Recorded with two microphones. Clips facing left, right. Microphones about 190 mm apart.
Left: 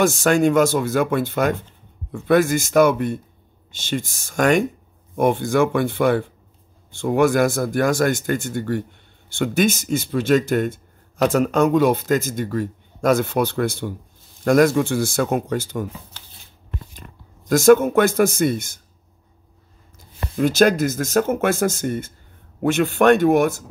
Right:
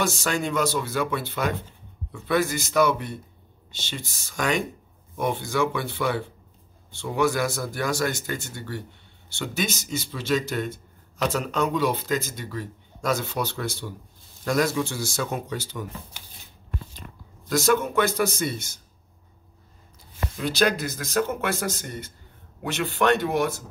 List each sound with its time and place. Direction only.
0.0 s speech: 50° left (ahead or behind)
17.5 s speech: 50° left (ahead or behind)
20.3 s speech: 45° left (ahead or behind)